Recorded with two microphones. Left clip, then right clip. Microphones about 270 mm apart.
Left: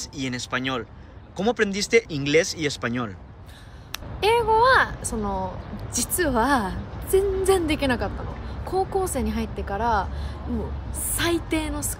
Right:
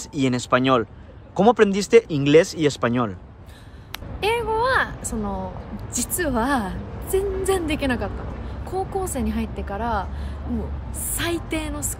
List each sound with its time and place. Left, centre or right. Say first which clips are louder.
0.1 s speech: right 9 dB; centre
3.9 s a woman's voice: left 2 dB; centre
11.1 s a woman's voice: left 2 dB; centre